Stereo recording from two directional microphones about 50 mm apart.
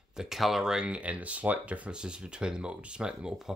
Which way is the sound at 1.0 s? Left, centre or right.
Right.